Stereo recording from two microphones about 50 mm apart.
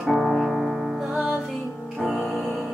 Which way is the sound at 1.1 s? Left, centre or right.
Right.